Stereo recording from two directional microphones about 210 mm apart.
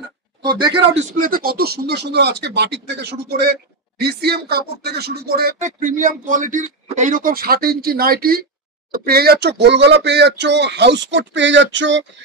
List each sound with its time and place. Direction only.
0.4 s speech: 20° right (ahead or behind)
0.9 s speech: 40° right (ahead or behind); by 12.0 s 60° right (ahead or behind)